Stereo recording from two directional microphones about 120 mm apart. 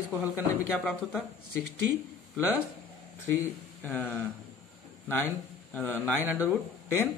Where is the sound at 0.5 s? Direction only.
15° left (ahead or behind).